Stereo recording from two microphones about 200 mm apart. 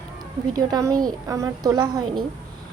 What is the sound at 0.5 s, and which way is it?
A woman's voice, 20° right (ahead or behind).